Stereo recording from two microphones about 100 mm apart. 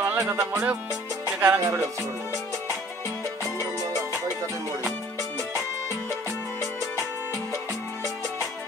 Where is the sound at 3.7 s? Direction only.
35° right (ahead or behind).